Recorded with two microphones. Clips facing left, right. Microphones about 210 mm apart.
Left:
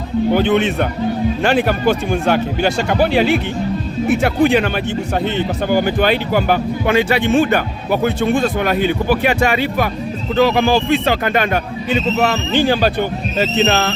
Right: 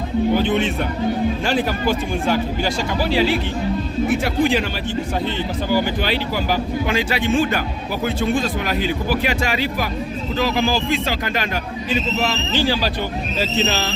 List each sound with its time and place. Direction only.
0.3 s speech: 65° left (ahead or behind)